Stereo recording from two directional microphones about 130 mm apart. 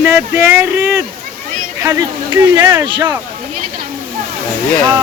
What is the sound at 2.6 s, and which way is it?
Speech, 30° right (ahead or behind).